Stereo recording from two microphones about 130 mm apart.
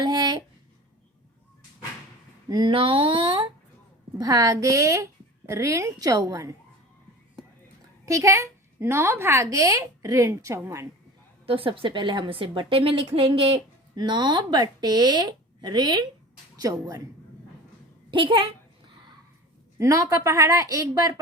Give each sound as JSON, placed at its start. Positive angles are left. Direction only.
{"t": 0.0, "sound": "a sound", "side_deg": -35}
{"t": 2.5, "sound": "a woman's voice", "side_deg": -35}
{"t": 4.2, "sound": "a woman's voice", "side_deg": -25}
{"t": 8.0, "sound": "a woman's voice", "side_deg": -25}
{"t": 11.4, "sound": "a woman's voice", "side_deg": -45}
{"t": 18.1, "sound": "a woman's voice", "side_deg": -40}
{"t": 19.8, "sound": "a woman's voice", "side_deg": -25}